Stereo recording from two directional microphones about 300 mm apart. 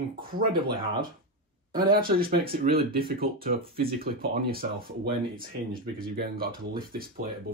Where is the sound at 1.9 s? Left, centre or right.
Right.